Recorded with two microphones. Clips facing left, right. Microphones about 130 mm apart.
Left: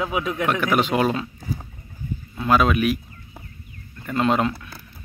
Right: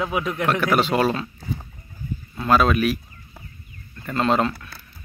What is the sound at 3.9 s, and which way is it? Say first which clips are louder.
Speech: even; 10° left (ahead or behind).